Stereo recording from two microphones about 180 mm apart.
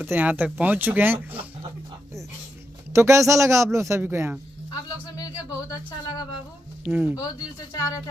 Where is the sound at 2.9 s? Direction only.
15° right (ahead or behind).